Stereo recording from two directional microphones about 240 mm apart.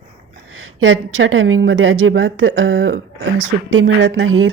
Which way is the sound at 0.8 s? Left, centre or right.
Right.